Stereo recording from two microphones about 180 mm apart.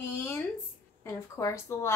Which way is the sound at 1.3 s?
15° left (ahead or behind).